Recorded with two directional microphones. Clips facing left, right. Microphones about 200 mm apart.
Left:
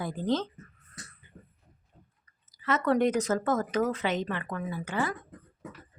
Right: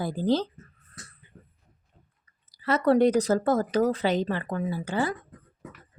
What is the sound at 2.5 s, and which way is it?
A woman's voice, 35° right (ahead or behind).